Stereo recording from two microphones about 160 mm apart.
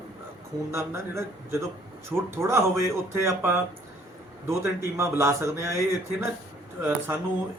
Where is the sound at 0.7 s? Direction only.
15° right (ahead or behind).